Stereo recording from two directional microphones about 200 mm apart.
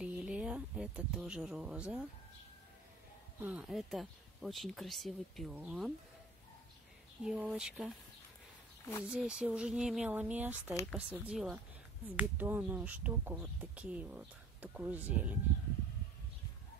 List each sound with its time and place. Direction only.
0.0 s a sound: 5° right (ahead or behind)
3.3 s speech: 5° right (ahead or behind)
7.2 s speech: 5° right (ahead or behind)
9.1 s speech: 5° right (ahead or behind)